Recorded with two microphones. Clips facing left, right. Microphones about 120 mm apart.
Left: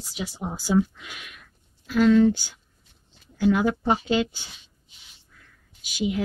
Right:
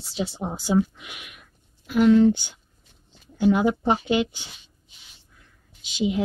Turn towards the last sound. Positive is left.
turn(degrees=-20)  # may be behind; listen again after turning